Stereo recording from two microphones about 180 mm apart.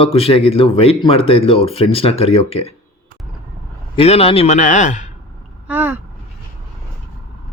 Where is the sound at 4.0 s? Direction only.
35° left (ahead or behind).